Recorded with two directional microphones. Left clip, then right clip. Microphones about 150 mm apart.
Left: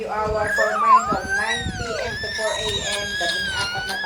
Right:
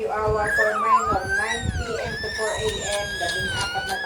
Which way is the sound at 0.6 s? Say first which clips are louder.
Left 5 dB; centre (ahead or behind).